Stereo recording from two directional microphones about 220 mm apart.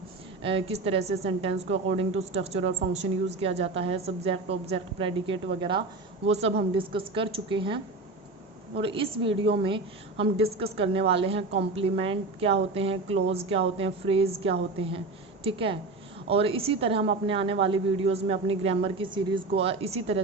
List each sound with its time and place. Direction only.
0.4 s a woman's voice: 25° right (ahead or behind)
8.8 s a woman's voice: 25° right (ahead or behind)